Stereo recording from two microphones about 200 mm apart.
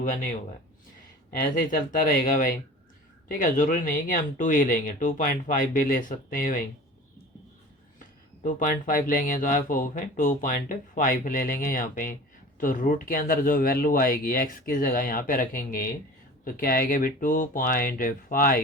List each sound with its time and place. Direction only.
1.5 s speech: 45° left (ahead or behind)
8.4 s speech: 45° left (ahead or behind)